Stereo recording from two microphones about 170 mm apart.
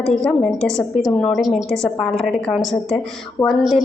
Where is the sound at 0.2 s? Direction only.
5° left (ahead or behind).